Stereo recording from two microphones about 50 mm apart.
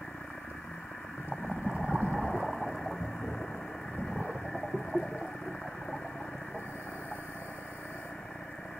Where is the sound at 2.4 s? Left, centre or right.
Centre.